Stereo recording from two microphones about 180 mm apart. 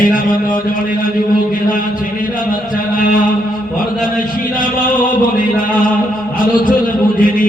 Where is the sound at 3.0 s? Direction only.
50° left (ahead or behind).